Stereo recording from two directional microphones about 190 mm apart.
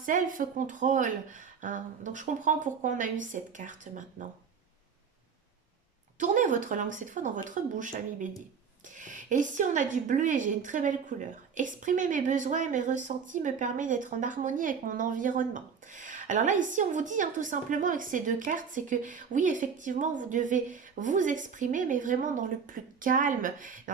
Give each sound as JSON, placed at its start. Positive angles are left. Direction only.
{"t": 0.0, "sound": "speech", "side_deg": -45}
{"t": 6.1, "sound": "speech", "side_deg": -40}